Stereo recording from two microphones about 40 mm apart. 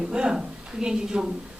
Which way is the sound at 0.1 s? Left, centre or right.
Right.